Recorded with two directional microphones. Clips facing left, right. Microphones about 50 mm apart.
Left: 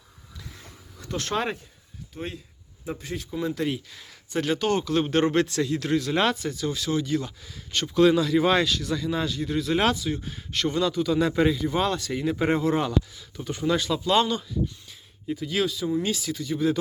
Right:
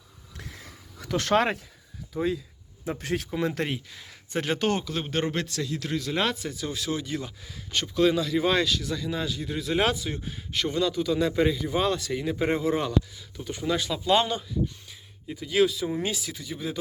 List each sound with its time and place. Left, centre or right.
0.9 s speech: right
2.8 s speech: right
3.3 s speech: right
4.3 s speech: right
4.5 s a man's voice: right
4.9 s a man's voice: centre
6.4 s speech: centre
7.9 s a man's voice: centre
9.9 s speech: right
10.2 s a man's voice: centre
14.0 s speech: centre
14.8 s speech: centre
15.9 s speech: right
16.1 s speech: centre